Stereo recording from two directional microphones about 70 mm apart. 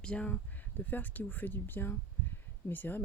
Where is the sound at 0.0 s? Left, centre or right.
Centre.